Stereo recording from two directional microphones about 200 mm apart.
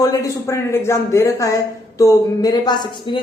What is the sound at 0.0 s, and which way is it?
A man's voice, 15° left (ahead or behind).